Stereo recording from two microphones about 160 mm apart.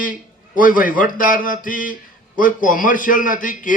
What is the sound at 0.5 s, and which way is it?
A man's voice, 60° left (ahead or behind).